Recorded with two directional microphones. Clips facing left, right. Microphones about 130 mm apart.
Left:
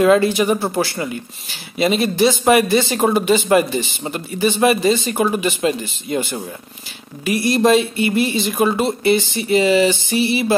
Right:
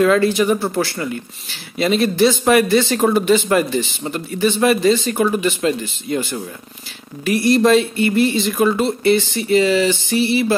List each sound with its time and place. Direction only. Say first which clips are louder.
0.0 s speech: left 1 dB; 20° left (ahead or behind)